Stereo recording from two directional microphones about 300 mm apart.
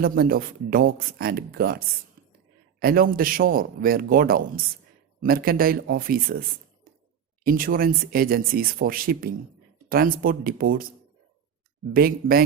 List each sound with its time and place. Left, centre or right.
0.0 s a man's voice: right
2.8 s a man's voice: right
7.4 s a man's voice: right
11.9 s a man's voice: right